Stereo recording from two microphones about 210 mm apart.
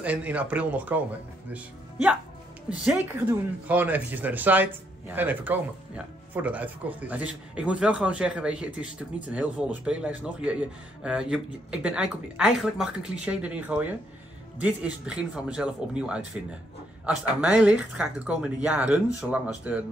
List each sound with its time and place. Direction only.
0.0 s a man's voice: 5° right (ahead or behind)